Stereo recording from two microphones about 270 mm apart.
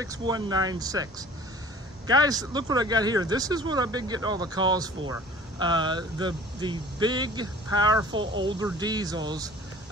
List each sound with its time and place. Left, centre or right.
0.0 s speech: centre
2.0 s speech: centre